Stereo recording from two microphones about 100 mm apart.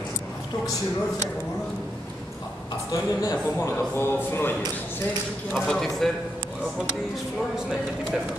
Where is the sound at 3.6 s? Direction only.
25° left (ahead or behind).